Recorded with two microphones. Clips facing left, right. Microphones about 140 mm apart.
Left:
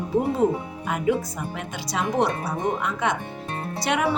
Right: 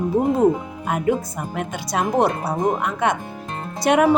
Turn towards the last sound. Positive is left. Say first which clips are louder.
# right 7 dB
turn(degrees=-50)  # may be behind; listen again after turning